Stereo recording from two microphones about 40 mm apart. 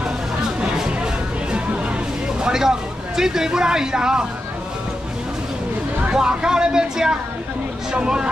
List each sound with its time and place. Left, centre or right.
2.4 s vehicle: centre
3.2 s speech: centre
6.1 s speech: centre